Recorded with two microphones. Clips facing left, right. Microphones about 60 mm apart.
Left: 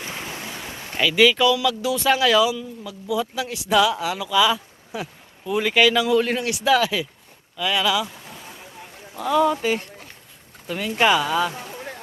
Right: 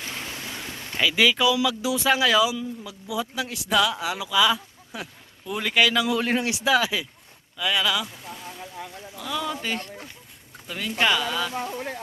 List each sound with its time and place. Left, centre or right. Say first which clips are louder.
0.0 s boat: left 2 dB; centre
0.5 s a sound: left 1 dB; centre
0.9 s speech: left 4 dB; centre
6.3 s speech: even; right
6.7 s speech: left 4 dB; centre
9.1 s speech: left 10 dB; left
9.6 s speech: left 6 dB; centre